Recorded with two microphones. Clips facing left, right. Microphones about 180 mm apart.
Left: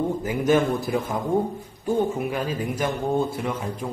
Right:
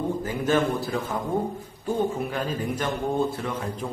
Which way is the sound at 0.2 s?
15° left (ahead or behind).